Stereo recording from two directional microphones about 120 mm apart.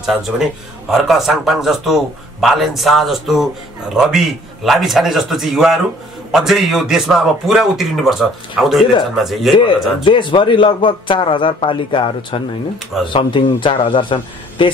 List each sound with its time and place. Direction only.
0.0 s a man's voice: 5° right (ahead or behind)
10.0 s a man's voice: 45° left (ahead or behind)